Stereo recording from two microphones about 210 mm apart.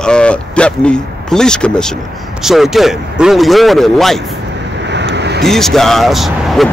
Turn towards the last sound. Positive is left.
turn(degrees=0)  # may be behind; listen again after turning